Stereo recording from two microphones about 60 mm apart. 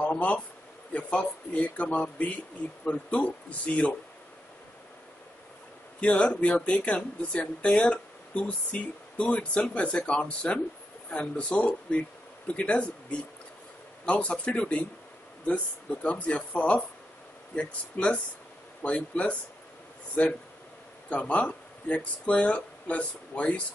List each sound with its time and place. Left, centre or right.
0.0 s a man's voice: left
5.9 s speech: left
21.1 s speech: left